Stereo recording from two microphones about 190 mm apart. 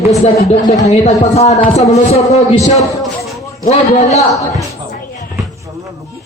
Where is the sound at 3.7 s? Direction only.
35° left (ahead or behind).